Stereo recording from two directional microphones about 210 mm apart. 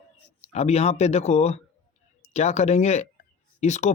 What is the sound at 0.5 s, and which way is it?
Speech, 30° left (ahead or behind).